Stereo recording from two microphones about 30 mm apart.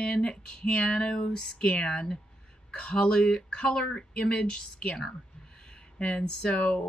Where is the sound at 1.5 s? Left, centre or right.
Left.